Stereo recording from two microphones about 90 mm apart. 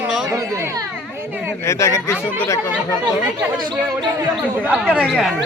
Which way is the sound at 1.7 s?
30° left (ahead or behind).